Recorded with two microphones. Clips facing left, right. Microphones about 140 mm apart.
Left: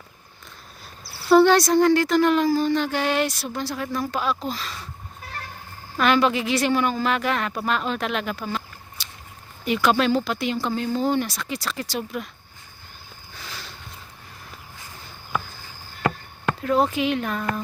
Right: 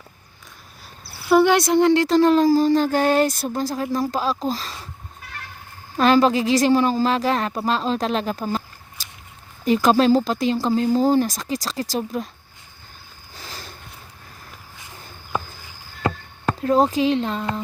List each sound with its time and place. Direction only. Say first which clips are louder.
1.4 s a woman's voice: even; 15° right (ahead or behind); by 4.8 s 35° right (ahead or behind)
6.0 s a woman's voice: right 4 dB; 35° right (ahead or behind)
9.6 s a woman's voice: right 4 dB; 40° right (ahead or behind)
13.3 s a sound: right 1 dB; 40° right (ahead or behind)
16.0 s chop: right 1 dB; 30° right (ahead or behind)